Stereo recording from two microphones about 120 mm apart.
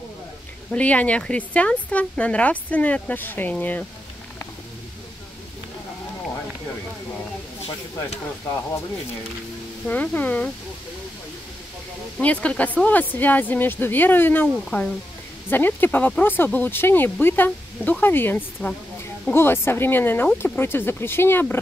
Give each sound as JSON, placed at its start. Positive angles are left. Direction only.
{"t": 0.7, "sound": "speech", "side_deg": 10}
{"t": 9.8, "sound": "speech", "side_deg": 15}
{"t": 12.2, "sound": "speech", "side_deg": 10}